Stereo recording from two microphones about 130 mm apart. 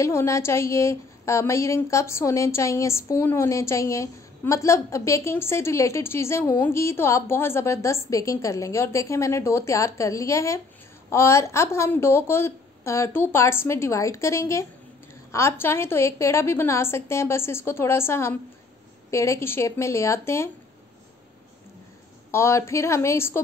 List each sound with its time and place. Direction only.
0.0 s a woman's voice: 20° left (ahead or behind)
22.3 s a woman's voice: 20° left (ahead or behind)